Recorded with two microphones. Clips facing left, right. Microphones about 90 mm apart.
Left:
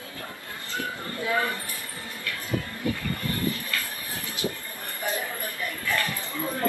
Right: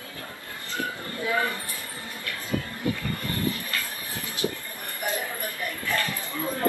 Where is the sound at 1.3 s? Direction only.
20° right (ahead or behind).